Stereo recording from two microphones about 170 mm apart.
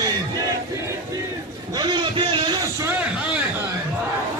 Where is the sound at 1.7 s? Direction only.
25° right (ahead or behind).